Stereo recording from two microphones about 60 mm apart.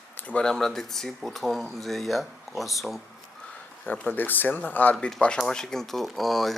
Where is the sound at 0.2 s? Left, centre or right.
Left.